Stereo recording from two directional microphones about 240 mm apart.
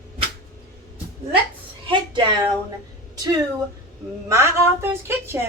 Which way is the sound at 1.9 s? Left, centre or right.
Centre.